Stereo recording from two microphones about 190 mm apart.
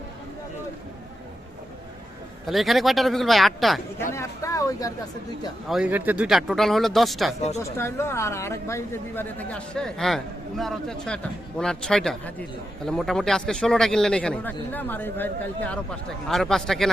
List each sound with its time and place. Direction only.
2.5 s a man's voice: centre (ahead or behind)
4.1 s speech: 15° left (ahead or behind)
5.6 s a man's voice: 5° right (ahead or behind)
7.6 s a woman's voice: 15° left (ahead or behind)